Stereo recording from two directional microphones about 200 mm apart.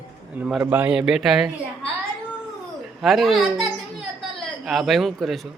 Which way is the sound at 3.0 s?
Centre (ahead or behind).